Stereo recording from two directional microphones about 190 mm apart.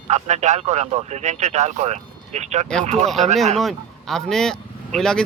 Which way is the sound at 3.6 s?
Centre (ahead or behind).